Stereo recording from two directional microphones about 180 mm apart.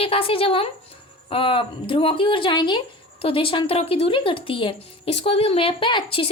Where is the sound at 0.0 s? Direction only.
30° left (ahead or behind).